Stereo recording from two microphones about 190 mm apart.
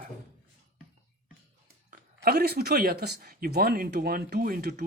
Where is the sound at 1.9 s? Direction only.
55° right (ahead or behind).